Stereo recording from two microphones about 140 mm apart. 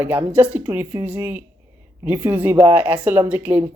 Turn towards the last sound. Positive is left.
turn(degrees=-15)  # may be behind; listen again after turning